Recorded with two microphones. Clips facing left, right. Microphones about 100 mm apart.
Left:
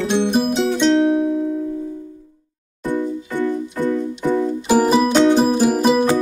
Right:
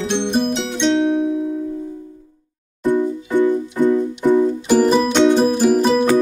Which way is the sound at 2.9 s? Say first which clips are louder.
Right 4 dB; 15° right (ahead or behind).